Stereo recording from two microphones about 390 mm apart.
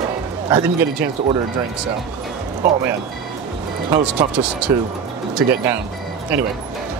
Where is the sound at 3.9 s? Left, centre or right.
Centre.